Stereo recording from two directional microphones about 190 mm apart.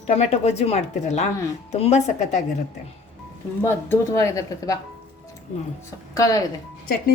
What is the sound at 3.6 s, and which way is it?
Speech, 10° left (ahead or behind).